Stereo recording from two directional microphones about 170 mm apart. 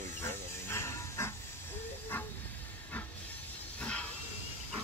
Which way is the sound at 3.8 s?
5° left (ahead or behind).